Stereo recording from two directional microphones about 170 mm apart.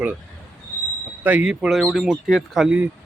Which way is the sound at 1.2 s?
5° right (ahead or behind).